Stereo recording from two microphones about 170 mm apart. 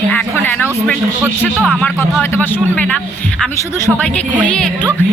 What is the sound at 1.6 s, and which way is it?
Speech, centre (ahead or behind).